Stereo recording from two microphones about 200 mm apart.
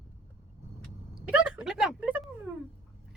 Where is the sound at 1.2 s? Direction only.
5° right (ahead or behind).